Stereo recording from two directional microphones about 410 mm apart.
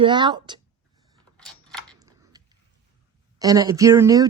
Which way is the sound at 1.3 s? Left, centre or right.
Centre.